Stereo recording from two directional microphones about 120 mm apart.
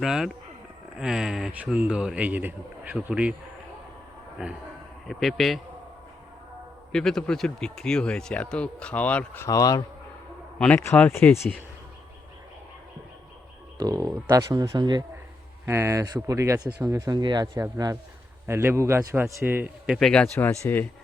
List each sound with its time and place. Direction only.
0.0 s a man's voice: 5° right (ahead or behind)
4.4 s a man's voice: 10° right (ahead or behind)
6.9 s speech: 5° left (ahead or behind)
9.5 s speech: 30° left (ahead or behind)
10.6 s speech: 15° left (ahead or behind)
13.7 s speech: 30° right (ahead or behind)
15.6 s a man's voice: 20° right (ahead or behind)
20.0 s speech: 5° left (ahead or behind)
20.3 s speech: 15° left (ahead or behind)